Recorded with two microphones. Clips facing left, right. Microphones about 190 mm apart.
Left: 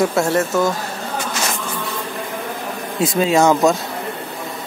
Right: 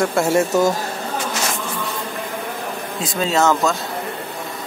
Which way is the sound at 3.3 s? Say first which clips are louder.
Left 3 dB; 15° left (ahead or behind).